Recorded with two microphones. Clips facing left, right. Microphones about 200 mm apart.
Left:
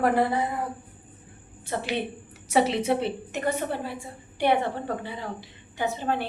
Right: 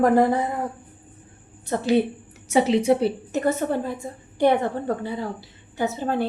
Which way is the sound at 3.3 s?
45° right (ahead or behind).